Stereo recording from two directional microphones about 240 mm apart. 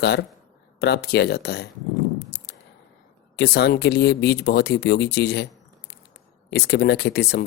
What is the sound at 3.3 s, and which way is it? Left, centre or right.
Speech, left.